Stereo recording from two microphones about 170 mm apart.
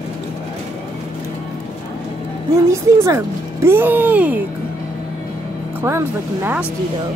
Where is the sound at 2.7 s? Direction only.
20° right (ahead or behind).